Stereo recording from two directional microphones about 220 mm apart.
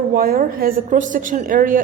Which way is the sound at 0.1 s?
40° right (ahead or behind).